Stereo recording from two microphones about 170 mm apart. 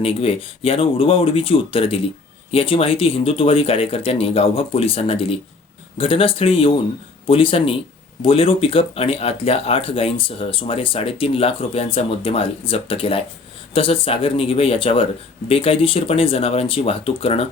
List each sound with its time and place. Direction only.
0.0 s speech: 35° left (ahead or behind)